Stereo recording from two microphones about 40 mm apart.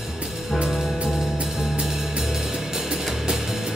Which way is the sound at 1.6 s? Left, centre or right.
Centre.